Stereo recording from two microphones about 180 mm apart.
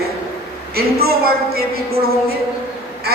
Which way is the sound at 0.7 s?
60° right (ahead or behind).